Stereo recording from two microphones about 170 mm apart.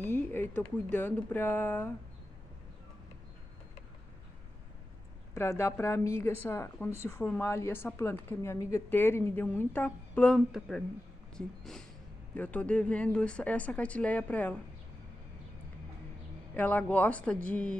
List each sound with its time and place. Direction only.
0.0 s a sound: 10° left (ahead or behind)
0.9 s speech: 10° left (ahead or behind)
5.3 s speech: 15° left (ahead or behind)
16.5 s speech: 10° left (ahead or behind)